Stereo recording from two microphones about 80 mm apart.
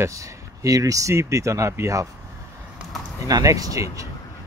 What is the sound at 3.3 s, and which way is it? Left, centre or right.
Speech, right.